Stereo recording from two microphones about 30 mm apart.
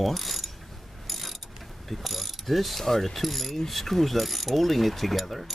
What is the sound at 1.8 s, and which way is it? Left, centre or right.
Mechanisms, centre.